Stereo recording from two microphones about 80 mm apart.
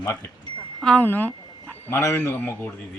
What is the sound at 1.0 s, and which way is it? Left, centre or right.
Speech, left.